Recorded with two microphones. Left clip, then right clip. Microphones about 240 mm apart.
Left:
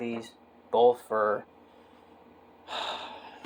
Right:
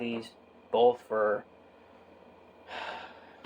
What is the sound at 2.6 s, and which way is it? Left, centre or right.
Gasp, left.